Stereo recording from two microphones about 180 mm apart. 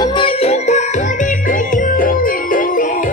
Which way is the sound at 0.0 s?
25° left (ahead or behind).